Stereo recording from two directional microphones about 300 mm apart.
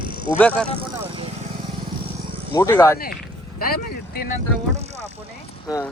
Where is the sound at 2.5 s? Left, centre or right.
Centre.